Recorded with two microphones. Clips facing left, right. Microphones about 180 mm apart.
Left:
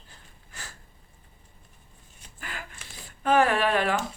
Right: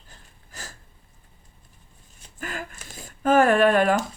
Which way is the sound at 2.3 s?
45° right (ahead or behind).